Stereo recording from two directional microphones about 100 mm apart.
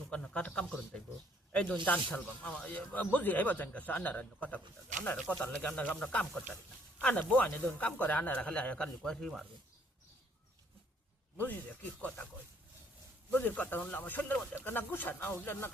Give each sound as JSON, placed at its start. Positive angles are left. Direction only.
{"t": 0.1, "sound": "speech", "side_deg": 10}
{"t": 11.3, "sound": "speech", "side_deg": 15}
{"t": 13.3, "sound": "speech", "side_deg": 15}